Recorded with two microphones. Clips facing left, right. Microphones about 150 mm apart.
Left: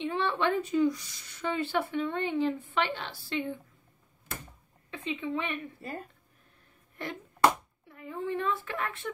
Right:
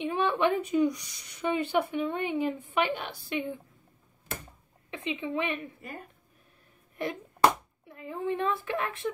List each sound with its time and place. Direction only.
0.0 s speech: 15° right (ahead or behind)
4.9 s a woman's voice: 20° right (ahead or behind)
7.9 s speech: 20° right (ahead or behind)